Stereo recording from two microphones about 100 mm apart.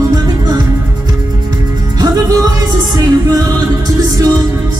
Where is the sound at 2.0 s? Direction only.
40° right (ahead or behind).